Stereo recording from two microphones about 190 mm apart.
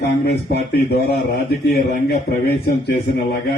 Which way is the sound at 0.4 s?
60° left (ahead or behind).